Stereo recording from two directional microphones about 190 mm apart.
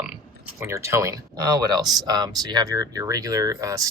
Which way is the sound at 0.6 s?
15° right (ahead or behind).